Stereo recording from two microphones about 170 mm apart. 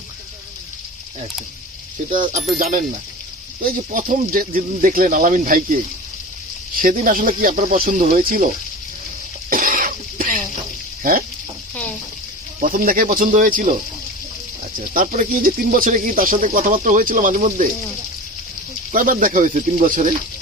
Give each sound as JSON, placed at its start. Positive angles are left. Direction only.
{"t": 2.1, "sound": "speech", "side_deg": -50}
{"t": 9.5, "sound": "cough", "side_deg": -55}
{"t": 12.5, "sound": "speech", "side_deg": -55}
{"t": 14.9, "sound": "speech", "side_deg": -50}
{"t": 18.9, "sound": "speech", "side_deg": -50}